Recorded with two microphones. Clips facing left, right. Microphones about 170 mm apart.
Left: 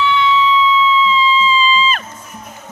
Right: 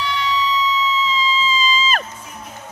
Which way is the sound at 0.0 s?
40° right (ahead or behind).